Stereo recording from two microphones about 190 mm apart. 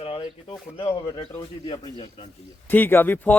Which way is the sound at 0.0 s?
30° left (ahead or behind).